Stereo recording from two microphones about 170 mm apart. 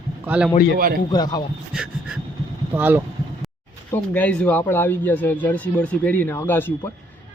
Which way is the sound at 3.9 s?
10° left (ahead or behind).